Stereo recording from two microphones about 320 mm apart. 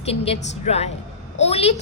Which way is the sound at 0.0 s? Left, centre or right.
Centre.